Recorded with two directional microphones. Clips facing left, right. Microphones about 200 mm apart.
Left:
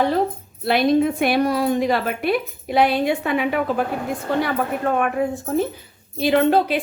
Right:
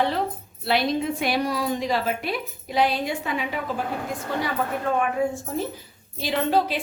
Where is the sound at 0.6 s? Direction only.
50° left (ahead or behind).